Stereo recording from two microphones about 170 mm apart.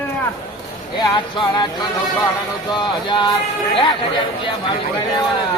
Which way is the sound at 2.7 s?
25° left (ahead or behind).